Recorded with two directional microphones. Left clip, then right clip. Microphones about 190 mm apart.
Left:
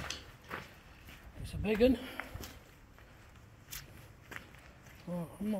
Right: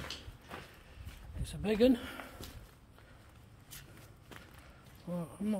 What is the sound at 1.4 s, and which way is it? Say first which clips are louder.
Speech: even; 15° right (ahead or behind).